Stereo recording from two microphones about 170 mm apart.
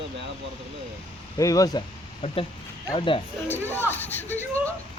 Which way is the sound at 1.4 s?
20° left (ahead or behind).